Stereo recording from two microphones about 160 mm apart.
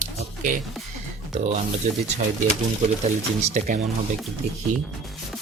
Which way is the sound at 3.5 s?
50° right (ahead or behind).